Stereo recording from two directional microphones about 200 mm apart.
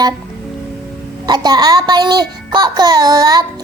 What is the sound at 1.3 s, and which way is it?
Speech, 20° right (ahead or behind).